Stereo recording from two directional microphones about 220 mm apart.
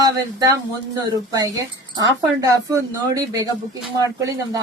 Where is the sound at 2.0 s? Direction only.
15° right (ahead or behind).